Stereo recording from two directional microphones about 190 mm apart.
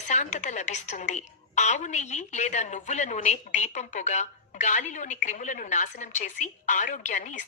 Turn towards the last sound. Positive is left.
turn(degrees=40)  # may be behind; listen again after turning